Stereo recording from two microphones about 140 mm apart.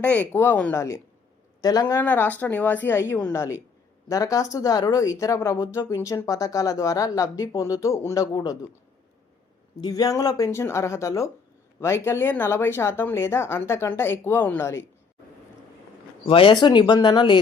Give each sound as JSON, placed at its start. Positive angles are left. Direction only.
{"t": 0.0, "sound": "speech", "side_deg": 10}
{"t": 2.0, "sound": "speech", "side_deg": 15}
{"t": 9.8, "sound": "speech", "side_deg": 25}
{"t": 16.2, "sound": "speech", "side_deg": 40}